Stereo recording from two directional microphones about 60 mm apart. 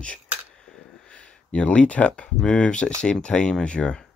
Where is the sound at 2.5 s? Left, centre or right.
Centre.